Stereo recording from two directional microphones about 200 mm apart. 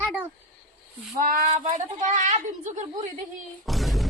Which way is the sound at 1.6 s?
35° right (ahead or behind).